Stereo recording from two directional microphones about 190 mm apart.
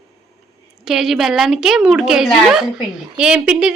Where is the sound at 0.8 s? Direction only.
Centre (ahead or behind).